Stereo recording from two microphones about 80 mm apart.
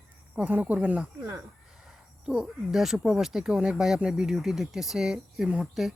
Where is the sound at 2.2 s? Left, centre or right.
Centre.